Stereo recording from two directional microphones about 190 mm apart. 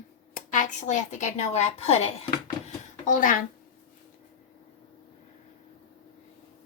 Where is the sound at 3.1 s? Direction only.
45° left (ahead or behind).